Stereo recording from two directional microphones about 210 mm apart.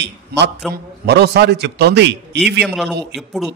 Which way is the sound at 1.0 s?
50° right (ahead or behind).